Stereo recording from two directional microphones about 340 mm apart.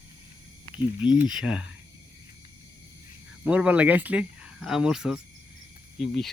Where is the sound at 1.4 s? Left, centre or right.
Centre.